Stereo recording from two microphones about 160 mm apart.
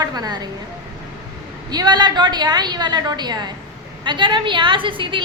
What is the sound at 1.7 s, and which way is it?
A woman's voice, 25° right (ahead or behind).